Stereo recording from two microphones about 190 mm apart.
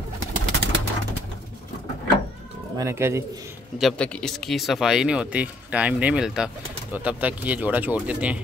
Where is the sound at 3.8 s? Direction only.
5° left (ahead or behind).